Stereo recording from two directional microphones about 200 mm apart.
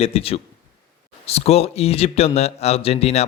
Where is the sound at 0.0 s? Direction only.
30° left (ahead or behind).